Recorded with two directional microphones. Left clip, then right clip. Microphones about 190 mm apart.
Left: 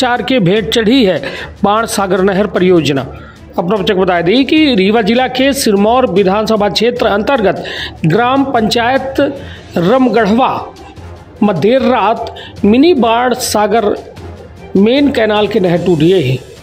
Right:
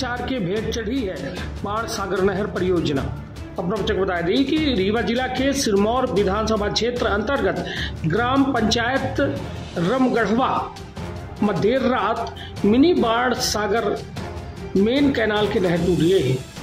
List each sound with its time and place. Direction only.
0.0 s a man's voice: 30° left (ahead or behind)